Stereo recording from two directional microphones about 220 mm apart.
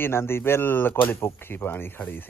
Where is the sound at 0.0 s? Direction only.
10° left (ahead or behind).